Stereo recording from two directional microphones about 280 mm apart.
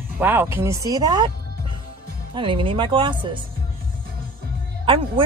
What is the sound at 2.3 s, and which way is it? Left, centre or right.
Speech, centre.